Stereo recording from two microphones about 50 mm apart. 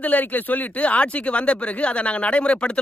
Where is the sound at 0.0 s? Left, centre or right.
Left.